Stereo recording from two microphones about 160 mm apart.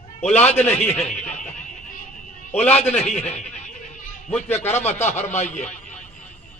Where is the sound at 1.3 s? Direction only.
50° left (ahead or behind).